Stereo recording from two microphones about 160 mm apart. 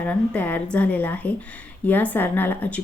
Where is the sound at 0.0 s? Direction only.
10° left (ahead or behind).